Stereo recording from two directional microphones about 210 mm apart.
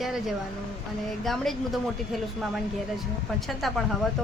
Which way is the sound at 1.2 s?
Centre (ahead or behind).